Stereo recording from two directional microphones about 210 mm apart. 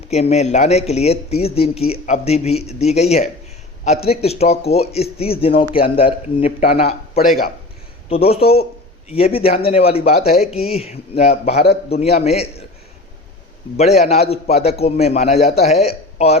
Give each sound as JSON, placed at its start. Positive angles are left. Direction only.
{"t": 0.1, "sound": "speech", "side_deg": 30}
{"t": 7.2, "sound": "speech", "side_deg": 45}
{"t": 8.1, "sound": "speech", "side_deg": 30}
{"t": 13.7, "sound": "speech", "side_deg": 30}